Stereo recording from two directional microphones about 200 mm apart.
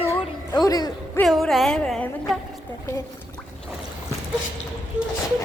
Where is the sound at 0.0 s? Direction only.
10° left (ahead or behind).